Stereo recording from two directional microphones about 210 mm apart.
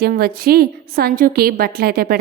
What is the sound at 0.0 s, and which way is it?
A woman's voice, 45° right (ahead or behind).